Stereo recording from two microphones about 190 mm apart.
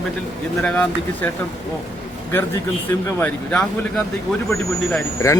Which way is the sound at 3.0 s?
10° left (ahead or behind).